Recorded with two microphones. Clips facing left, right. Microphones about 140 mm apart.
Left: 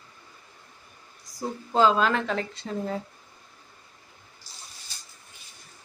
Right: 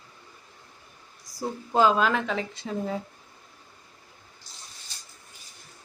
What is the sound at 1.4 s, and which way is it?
A woman's voice, 10° right (ahead or behind).